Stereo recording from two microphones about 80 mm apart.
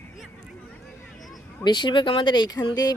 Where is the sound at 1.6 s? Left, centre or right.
Left.